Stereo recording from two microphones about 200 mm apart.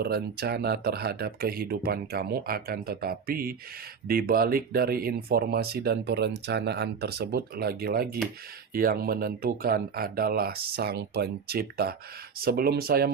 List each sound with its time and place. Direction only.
0.0 s speech: 50° right (ahead or behind)